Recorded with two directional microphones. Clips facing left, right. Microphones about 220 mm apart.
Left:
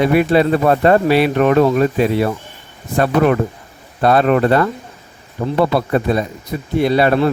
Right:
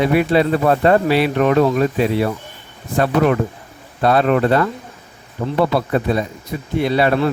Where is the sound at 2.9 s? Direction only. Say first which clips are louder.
Left 2 dB; 45° left (ahead or behind).